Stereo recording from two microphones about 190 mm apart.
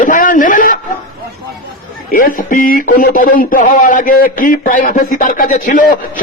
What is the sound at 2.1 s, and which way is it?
Speech, 45° left (ahead or behind).